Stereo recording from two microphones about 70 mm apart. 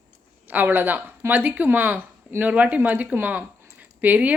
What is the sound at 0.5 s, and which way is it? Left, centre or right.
A woman's voice, right.